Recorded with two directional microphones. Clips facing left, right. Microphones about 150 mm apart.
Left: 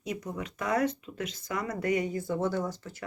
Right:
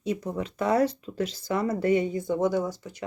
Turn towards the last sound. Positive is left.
turn(degrees=-15)  # may be behind; listen again after turning